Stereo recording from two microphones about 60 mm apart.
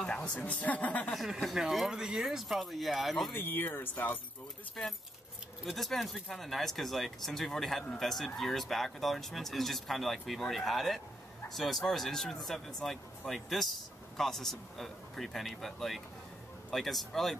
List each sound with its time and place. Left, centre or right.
0.0 s a woman's voice: centre
1.5 s speech: centre
3.3 s speech: left
5.7 s speech: centre